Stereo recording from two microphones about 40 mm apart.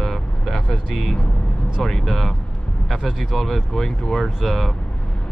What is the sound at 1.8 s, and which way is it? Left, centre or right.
Speech, centre.